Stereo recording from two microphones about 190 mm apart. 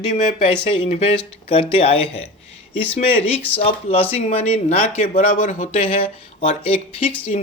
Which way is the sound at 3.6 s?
30° left (ahead or behind).